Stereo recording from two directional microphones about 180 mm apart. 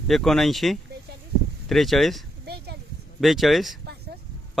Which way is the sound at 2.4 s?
65° right (ahead or behind).